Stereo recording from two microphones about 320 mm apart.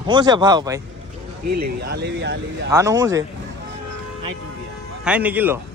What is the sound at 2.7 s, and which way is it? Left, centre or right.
Speech, centre.